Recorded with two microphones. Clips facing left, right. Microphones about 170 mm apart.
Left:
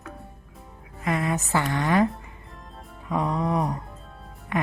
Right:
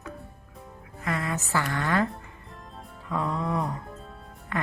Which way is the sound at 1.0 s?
20° left (ahead or behind).